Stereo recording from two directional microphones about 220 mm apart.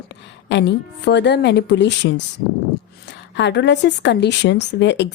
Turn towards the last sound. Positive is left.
turn(degrees=55)  # may be behind; listen again after turning